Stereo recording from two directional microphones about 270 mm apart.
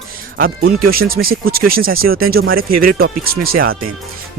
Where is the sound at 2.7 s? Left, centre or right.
Right.